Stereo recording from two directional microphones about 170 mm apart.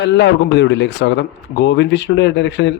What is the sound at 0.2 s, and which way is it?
Speech, 90° left.